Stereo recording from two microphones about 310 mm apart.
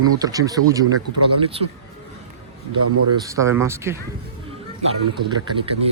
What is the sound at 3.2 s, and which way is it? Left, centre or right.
Speech, centre.